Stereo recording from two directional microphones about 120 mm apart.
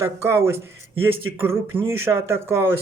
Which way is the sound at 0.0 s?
20° right (ahead or behind).